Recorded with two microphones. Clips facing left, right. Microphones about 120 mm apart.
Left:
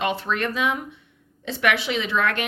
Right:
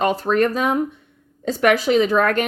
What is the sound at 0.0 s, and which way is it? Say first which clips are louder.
A woman's voice: right 7 dB; 40° right (ahead or behind).